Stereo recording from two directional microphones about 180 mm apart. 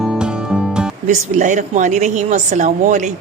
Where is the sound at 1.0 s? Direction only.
45° right (ahead or behind).